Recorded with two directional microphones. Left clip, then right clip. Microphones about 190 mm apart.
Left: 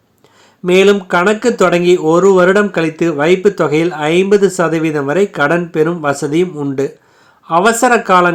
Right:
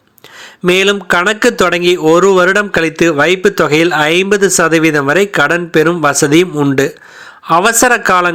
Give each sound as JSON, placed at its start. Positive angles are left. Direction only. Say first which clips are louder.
{"t": 0.6, "sound": "speech", "louder": "left 1 dB", "side_deg": -15}